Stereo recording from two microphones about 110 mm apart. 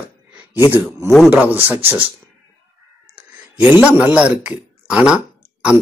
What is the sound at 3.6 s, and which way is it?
Speech, 10° right (ahead or behind).